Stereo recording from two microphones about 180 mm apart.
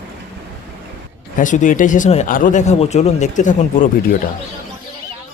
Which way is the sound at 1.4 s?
45° left (ahead or behind).